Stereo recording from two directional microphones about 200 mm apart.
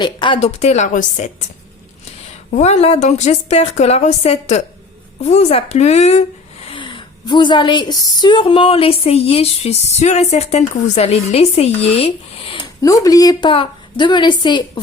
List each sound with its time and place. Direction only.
0.0 s a woman's voice: 25° left (ahead or behind)
2.5 s a woman's voice: 35° left (ahead or behind)